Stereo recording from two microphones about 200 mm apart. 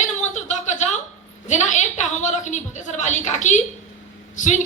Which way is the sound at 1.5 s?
35° left (ahead or behind).